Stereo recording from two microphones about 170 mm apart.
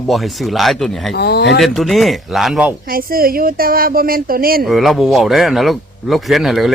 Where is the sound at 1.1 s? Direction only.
75° left (ahead or behind).